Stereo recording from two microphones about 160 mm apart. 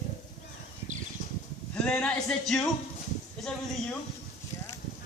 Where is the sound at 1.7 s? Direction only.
5° left (ahead or behind).